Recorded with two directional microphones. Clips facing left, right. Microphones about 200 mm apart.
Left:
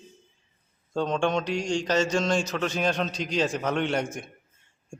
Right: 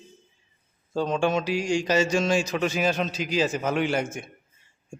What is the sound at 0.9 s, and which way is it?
A man's voice, 5° right (ahead or behind).